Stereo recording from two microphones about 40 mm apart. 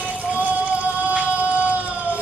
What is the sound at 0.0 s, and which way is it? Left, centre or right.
Raindrop, right.